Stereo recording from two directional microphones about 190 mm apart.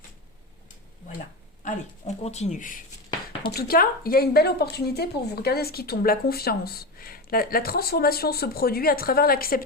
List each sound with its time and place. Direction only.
1.6 s speech: 35° left (ahead or behind)